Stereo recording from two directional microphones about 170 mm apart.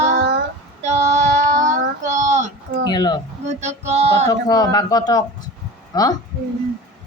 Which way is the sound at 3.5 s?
40° right (ahead or behind).